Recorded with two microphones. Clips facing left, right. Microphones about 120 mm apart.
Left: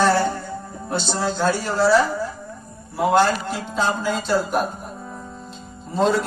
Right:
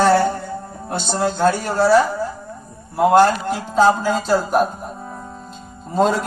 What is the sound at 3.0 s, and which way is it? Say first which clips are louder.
Speech: right 5 dB; 45° right (ahead or behind).